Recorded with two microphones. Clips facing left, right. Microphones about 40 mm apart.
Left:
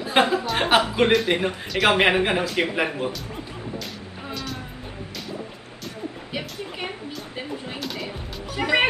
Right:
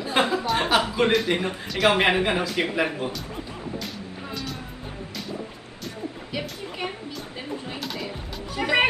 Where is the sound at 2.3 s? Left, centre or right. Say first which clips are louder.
Left 2 dB; centre.